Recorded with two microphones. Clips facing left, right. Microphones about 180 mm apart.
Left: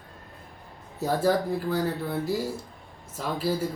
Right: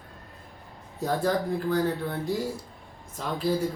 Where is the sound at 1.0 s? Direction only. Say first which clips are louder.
Left 2 dB; 5° left (ahead or behind).